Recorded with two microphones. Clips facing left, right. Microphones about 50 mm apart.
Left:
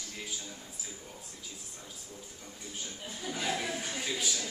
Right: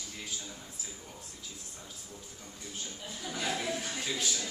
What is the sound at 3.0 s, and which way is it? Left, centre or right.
Speech, left.